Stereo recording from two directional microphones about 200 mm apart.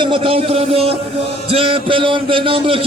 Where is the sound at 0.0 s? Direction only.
25° right (ahead or behind).